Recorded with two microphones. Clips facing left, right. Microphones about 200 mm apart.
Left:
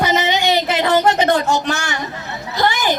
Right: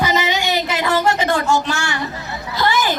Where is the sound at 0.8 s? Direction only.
20° left (ahead or behind).